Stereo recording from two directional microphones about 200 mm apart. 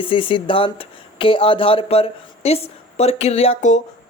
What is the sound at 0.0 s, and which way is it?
Speech, 25° left (ahead or behind).